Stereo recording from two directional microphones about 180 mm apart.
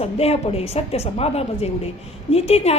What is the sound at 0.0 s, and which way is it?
Speech, 35° left (ahead or behind).